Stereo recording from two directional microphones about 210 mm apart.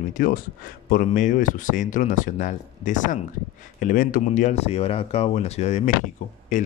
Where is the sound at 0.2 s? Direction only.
40° left (ahead or behind).